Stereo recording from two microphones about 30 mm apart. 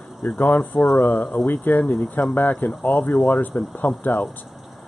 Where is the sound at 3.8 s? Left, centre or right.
Left.